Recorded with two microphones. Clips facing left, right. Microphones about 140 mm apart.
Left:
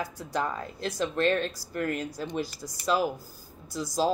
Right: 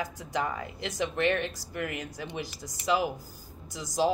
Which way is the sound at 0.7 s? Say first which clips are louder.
Left 3 dB; 20° right (ahead or behind).